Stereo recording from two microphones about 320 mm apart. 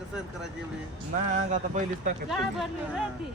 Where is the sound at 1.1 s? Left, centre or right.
Right.